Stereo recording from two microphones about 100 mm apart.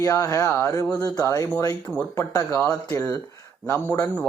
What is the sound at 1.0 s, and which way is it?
Speech, 35° left (ahead or behind).